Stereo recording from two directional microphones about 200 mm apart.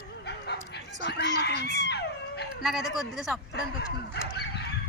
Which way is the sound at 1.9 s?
55° left (ahead or behind).